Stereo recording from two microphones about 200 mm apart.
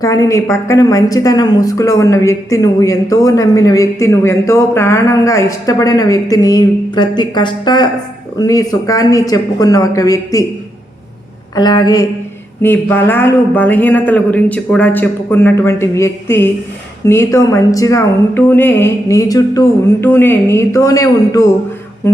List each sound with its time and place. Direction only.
0.0 s a woman's voice: 15° left (ahead or behind)
11.5 s a sound: 20° left (ahead or behind)
12.6 s a woman's voice: 10° left (ahead or behind)